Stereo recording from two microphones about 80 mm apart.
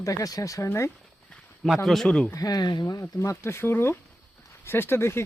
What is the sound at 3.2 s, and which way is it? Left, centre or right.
Speech, left.